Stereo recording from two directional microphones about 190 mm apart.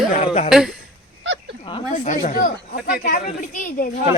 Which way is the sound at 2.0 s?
40° left (ahead or behind).